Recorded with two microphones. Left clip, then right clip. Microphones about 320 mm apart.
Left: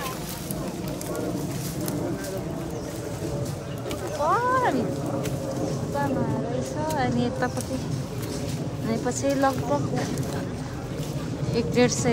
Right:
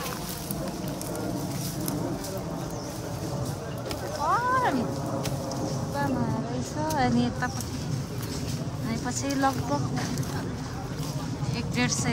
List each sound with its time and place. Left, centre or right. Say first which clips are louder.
4.3 s a sound: left 2 dB; centre
7.0 s speech: even; centre
8.8 s speech: left 6 dB; centre
11.5 s speech: left 7 dB; centre